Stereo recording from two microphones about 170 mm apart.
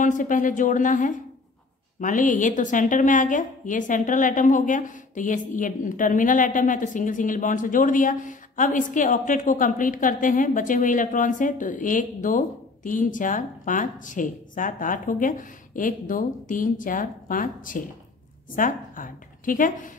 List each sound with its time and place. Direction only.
0.0 s a woman's voice: 50° left (ahead or behind)